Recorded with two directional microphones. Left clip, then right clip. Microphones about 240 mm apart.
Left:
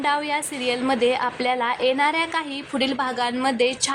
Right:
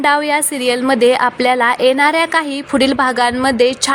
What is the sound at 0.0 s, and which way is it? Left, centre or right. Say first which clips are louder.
A woman's voice: right 9 dB; right.